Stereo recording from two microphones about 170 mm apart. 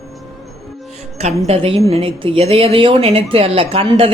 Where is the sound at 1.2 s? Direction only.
40° right (ahead or behind).